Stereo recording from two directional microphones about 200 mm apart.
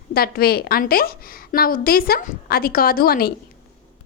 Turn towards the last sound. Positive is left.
turn(degrees=50)  # may be behind; listen again after turning